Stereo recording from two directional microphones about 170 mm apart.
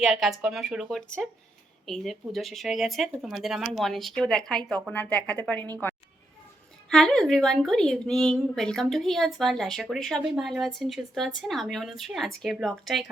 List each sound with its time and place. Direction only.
0.0 s speech: centre (ahead or behind)
6.9 s speech: 5° left (ahead or behind)